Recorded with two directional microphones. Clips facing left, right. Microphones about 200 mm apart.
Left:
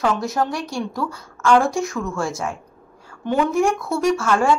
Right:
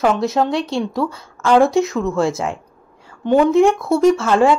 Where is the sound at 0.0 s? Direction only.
20° right (ahead or behind).